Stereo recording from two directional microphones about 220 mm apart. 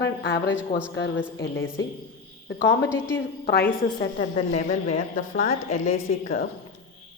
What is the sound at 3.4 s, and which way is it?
Speech, 45° left (ahead or behind).